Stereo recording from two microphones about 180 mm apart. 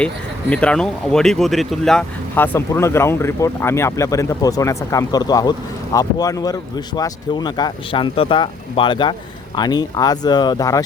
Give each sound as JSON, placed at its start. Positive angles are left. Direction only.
{"t": 0.5, "sound": "speech", "side_deg": 5}